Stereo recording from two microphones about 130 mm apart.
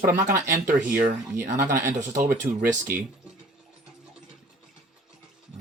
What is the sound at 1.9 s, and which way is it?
Speech, 85° right.